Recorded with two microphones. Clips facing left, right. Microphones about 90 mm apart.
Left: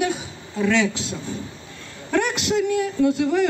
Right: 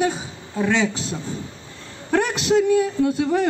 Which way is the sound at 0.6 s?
20° right (ahead or behind).